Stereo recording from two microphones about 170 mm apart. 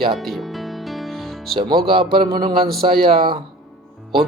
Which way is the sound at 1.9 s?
30° right (ahead or behind).